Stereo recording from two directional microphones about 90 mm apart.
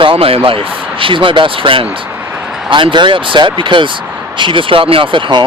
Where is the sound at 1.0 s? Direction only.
70° right (ahead or behind).